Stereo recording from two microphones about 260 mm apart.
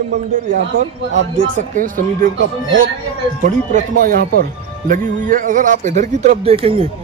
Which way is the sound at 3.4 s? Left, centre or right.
Right.